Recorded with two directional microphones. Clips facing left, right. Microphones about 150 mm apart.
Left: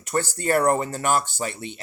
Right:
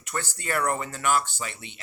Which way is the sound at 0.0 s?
40° left (ahead or behind).